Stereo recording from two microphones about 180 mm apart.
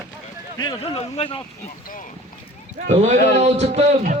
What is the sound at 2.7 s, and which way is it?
A man's voice, 40° right (ahead or behind).